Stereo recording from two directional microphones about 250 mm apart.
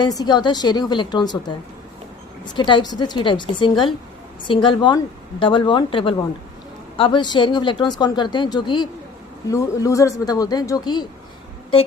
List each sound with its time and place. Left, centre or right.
0.0 s speech: centre